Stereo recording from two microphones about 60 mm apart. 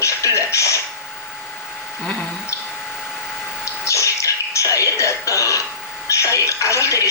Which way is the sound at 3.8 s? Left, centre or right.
Left.